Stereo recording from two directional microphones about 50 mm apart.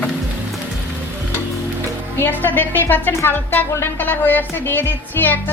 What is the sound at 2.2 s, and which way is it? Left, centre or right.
Music, left.